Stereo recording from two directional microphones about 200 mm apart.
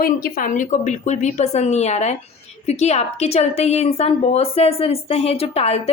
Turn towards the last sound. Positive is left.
turn(degrees=30)  # may be behind; listen again after turning